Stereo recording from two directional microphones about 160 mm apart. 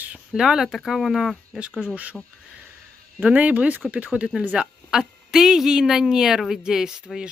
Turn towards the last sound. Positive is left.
turn(degrees=-5)  # may be behind; listen again after turning